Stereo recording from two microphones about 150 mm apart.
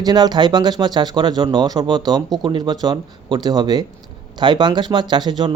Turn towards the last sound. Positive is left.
turn(degrees=-30)  # may be behind; listen again after turning